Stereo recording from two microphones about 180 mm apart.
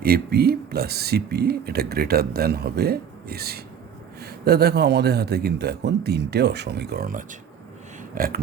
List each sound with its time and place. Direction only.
0.0 s speech: 60° right (ahead or behind)